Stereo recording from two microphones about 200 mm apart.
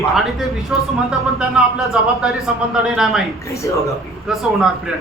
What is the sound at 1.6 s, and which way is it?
A man's voice, 5° right (ahead or behind).